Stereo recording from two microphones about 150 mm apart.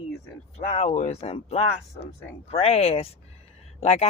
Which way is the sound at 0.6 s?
45° left (ahead or behind).